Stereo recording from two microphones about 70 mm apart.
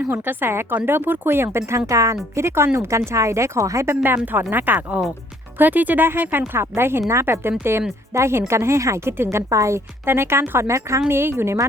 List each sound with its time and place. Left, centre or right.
0.1 s a woman's voice: right
1.9 s a woman's voice: right
4.5 s a woman's voice: right
9.5 s a woman's voice: right
11.1 s a woman's voice: right